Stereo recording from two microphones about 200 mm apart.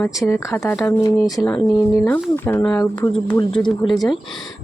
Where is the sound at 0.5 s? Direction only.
10° left (ahead or behind).